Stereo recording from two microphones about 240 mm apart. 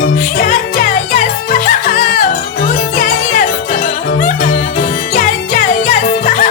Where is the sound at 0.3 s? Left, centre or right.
Left.